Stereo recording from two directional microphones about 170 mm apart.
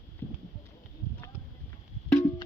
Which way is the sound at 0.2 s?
10° left (ahead or behind).